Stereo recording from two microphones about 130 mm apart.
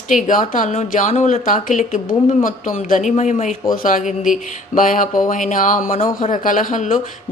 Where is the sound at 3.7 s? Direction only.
90° left.